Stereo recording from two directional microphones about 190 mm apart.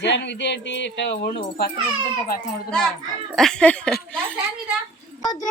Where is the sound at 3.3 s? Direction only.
Centre (ahead or behind).